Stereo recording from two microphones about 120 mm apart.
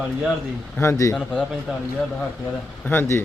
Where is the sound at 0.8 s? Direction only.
25° left (ahead or behind).